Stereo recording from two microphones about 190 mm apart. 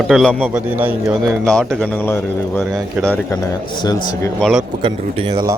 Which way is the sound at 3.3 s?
20° left (ahead or behind).